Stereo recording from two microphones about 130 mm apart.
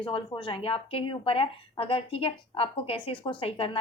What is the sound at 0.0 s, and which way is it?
A woman's voice, 40° left (ahead or behind).